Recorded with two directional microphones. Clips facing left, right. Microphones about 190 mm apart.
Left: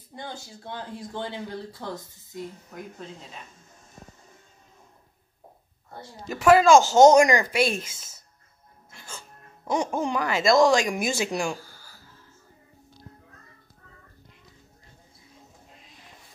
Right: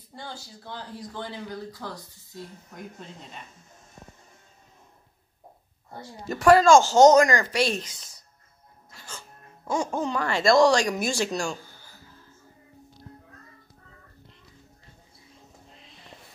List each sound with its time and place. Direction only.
0.1 s speech: 20° left (ahead or behind)
6.3 s speech: 5° left (ahead or behind)
7.9 s speech: 25° left (ahead or behind)
9.8 s speech: 15° left (ahead or behind)